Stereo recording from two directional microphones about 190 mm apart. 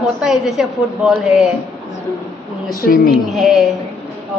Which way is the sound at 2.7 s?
50° left (ahead or behind).